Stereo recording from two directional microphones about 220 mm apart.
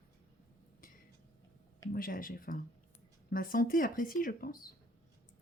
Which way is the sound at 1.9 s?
40° left (ahead or behind).